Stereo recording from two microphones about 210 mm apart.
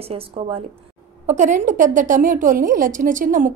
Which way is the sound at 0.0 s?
30° right (ahead or behind).